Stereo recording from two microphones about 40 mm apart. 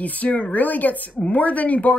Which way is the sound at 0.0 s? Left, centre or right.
Left.